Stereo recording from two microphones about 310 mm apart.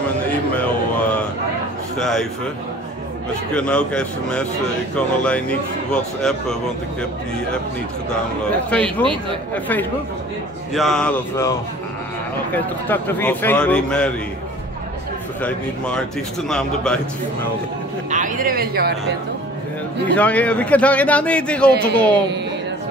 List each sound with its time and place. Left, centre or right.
2.0 s a man's voice: centre
3.5 s a man's voice: centre
8.5 s a man's voice: centre
12.5 s a man's voice: centre
15.4 s a man's voice: centre
18.1 s speech: right
20.2 s a man's voice: centre